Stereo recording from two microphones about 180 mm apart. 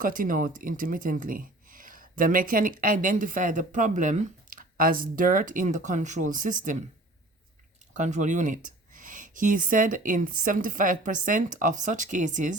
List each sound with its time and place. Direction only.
0.0 s speech: 50° right (ahead or behind)
7.9 s speech: 45° right (ahead or behind)